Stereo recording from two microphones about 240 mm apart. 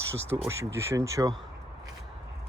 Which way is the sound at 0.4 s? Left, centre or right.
Centre.